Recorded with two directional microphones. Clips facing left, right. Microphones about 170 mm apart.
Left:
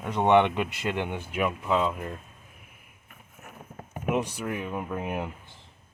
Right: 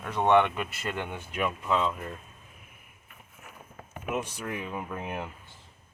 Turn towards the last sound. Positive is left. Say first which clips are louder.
# left 4 dB
turn(degrees=10)  # may be behind; listen again after turning